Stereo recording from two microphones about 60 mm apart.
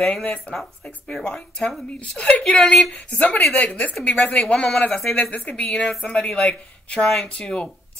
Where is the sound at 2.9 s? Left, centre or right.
Left.